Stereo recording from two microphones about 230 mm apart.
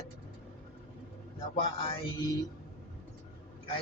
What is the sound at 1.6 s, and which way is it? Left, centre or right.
Speech, left.